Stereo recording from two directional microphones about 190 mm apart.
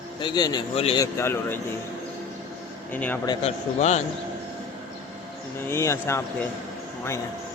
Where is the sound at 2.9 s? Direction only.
10° left (ahead or behind).